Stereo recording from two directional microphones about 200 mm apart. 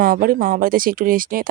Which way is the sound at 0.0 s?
45° right (ahead or behind).